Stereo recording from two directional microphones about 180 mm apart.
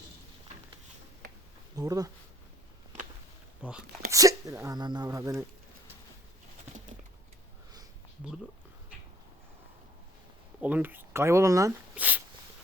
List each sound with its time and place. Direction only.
1.7 s speech: 20° right (ahead or behind)
3.6 s speech: 5° right (ahead or behind)
4.1 s speech: 20° right (ahead or behind)
10.6 s speech: 10° right (ahead or behind)